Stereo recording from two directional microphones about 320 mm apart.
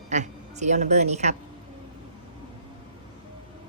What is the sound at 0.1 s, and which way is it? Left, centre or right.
A woman's voice, right.